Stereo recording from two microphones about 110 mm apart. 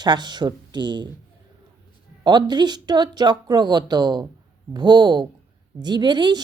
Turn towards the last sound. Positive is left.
turn(degrees=-45)  # may be behind; listen again after turning